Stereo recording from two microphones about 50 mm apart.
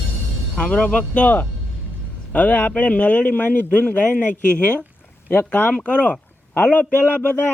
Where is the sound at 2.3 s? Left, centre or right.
Left.